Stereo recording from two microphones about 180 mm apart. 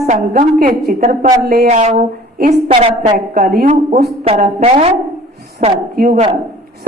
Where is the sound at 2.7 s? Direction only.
30° right (ahead or behind).